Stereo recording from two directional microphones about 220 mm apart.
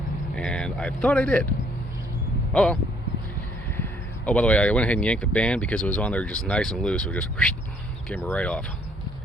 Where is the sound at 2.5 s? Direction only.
5° left (ahead or behind).